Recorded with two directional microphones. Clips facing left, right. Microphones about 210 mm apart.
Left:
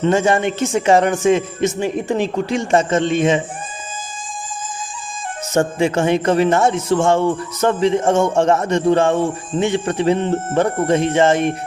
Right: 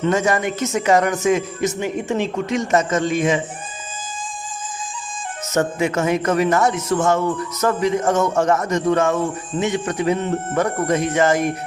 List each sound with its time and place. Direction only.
0.0 s speech: 30° left (ahead or behind)
5.5 s speech: 30° left (ahead or behind)